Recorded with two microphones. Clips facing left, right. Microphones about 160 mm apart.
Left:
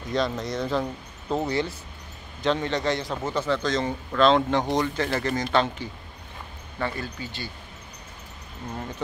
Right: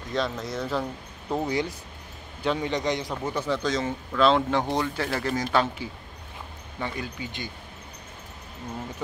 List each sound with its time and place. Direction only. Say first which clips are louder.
0.1 s a man's voice: left 2 dB; centre (ahead or behind); by 7.5 s 15° right (ahead or behind)